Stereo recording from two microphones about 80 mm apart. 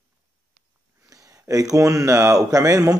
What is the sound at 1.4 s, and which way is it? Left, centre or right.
Speech, right.